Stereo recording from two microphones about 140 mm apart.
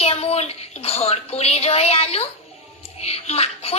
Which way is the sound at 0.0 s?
45° left (ahead or behind).